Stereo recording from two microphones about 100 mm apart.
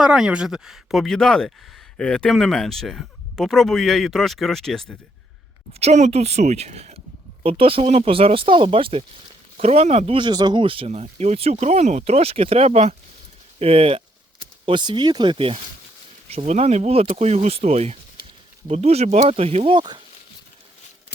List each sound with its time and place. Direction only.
0.0 s speech: 10° right (ahead or behind)
5.8 s speech: 90° right
7.4 s speech: 70° right (ahead or behind)
9.6 s speech: 90° right
10.2 s speech: 50° right (ahead or behind); by 12.9 s 90° right
13.6 s speech: 75° right (ahead or behind)
14.6 s speech: 50° right (ahead or behind)
16.3 s speech: 90° right; by 20.0 s 50° right (ahead or behind)